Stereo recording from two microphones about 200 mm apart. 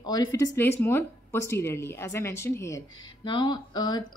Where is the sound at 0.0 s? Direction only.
20° left (ahead or behind).